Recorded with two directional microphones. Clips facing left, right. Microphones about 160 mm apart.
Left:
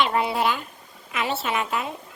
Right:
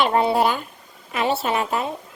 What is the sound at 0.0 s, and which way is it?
A child's voice, 35° right (ahead or behind).